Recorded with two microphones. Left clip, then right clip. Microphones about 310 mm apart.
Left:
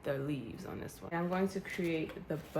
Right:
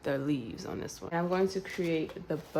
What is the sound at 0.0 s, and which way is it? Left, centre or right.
Speech, right.